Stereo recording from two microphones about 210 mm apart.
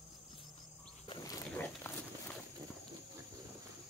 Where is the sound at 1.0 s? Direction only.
20° left (ahead or behind).